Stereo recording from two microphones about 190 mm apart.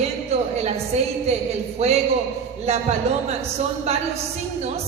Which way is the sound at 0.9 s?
35° right (ahead or behind).